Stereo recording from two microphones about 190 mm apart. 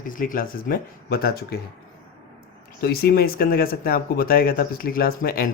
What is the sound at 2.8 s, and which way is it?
Speech, 55° left (ahead or behind).